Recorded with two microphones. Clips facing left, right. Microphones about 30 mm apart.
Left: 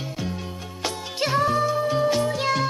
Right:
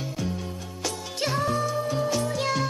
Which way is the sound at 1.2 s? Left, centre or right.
Left.